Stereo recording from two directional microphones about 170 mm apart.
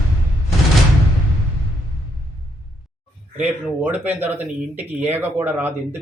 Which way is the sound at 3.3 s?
10° right (ahead or behind).